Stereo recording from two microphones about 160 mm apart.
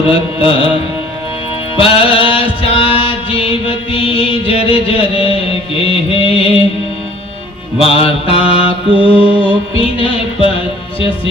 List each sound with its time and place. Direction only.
0.1 s music: 35° left (ahead or behind)
1.7 s music: 35° left (ahead or behind)
7.8 s music: 35° left (ahead or behind)